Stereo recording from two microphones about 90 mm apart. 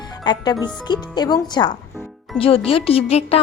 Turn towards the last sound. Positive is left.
turn(degrees=90)